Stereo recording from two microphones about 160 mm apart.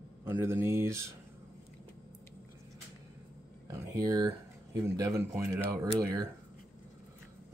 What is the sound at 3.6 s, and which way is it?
Speech, 20° right (ahead or behind).